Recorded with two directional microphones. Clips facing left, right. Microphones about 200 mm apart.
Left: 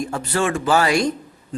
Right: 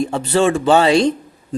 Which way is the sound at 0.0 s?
25° right (ahead or behind).